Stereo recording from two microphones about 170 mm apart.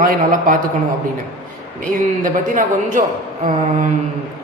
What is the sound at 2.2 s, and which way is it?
Speech, 50° right (ahead or behind).